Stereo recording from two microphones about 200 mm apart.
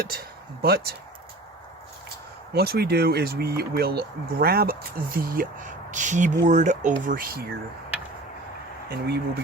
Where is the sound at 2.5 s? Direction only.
50° right (ahead or behind).